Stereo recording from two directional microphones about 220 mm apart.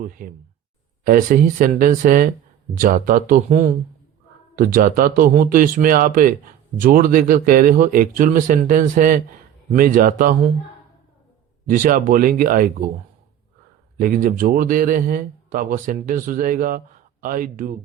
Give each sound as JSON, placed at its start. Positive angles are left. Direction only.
{"t": 0.0, "sound": "speech", "side_deg": -40}
{"t": 11.6, "sound": "speech", "side_deg": -40}
{"t": 14.0, "sound": "speech", "side_deg": -40}